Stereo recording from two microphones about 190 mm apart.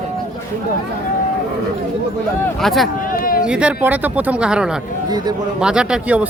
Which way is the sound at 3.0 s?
45° left (ahead or behind).